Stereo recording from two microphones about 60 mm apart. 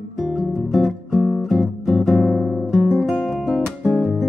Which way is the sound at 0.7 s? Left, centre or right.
Centre.